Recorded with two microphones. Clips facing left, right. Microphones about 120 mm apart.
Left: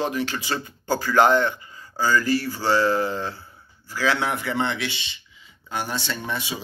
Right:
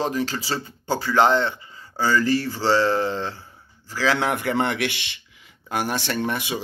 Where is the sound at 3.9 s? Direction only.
40° right (ahead or behind); by 5.2 s 70° right (ahead or behind).